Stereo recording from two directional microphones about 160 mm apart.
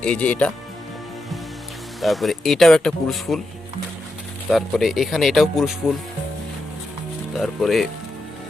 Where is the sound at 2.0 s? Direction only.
Centre (ahead or behind).